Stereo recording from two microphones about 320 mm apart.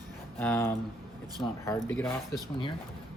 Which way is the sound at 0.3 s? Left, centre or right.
Centre.